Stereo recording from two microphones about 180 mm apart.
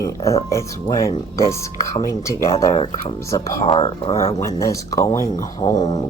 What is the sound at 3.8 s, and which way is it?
Speech, 30° left (ahead or behind).